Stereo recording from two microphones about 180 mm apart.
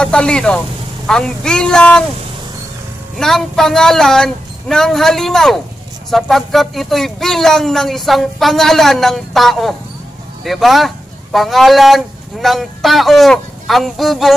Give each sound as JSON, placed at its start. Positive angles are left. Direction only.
{"t": 0.0, "sound": "speech", "side_deg": 5}
{"t": 3.2, "sound": "speech", "side_deg": 0}